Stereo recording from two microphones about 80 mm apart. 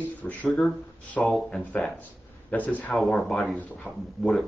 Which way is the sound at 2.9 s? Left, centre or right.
Centre.